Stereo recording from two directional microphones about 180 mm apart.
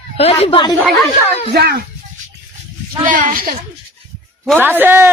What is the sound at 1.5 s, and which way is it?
Speech, 65° right (ahead or behind).